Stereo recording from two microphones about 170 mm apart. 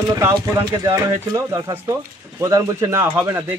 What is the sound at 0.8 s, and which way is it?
Speech, 20° right (ahead or behind).